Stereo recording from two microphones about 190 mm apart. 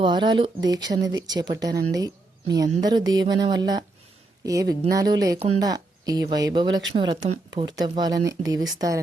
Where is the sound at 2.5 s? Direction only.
20° right (ahead or behind).